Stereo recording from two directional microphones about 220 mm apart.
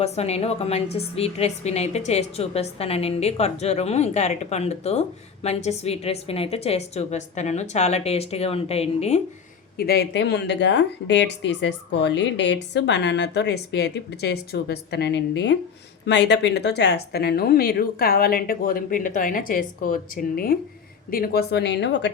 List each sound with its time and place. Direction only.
0.0 s a woman's voice: 30° left (ahead or behind)
9.7 s a woman's voice: 45° left (ahead or behind)